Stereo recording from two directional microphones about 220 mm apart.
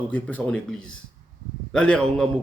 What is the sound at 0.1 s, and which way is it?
Speech, 5° left (ahead or behind).